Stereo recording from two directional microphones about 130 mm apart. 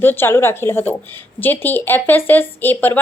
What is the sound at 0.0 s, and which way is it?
Speech, 15° left (ahead or behind).